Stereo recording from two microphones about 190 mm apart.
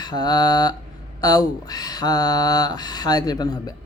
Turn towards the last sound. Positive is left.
turn(degrees=20)  # may be behind; listen again after turning